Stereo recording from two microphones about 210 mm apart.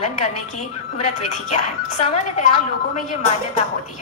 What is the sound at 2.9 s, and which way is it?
Speech, 35° left (ahead or behind).